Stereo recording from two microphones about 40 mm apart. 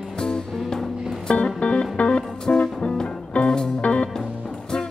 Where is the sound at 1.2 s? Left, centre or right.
Left.